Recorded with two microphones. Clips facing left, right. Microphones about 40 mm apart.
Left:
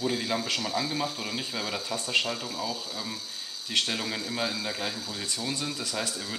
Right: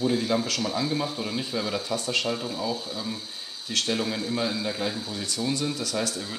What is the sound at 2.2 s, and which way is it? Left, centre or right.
Speech, centre.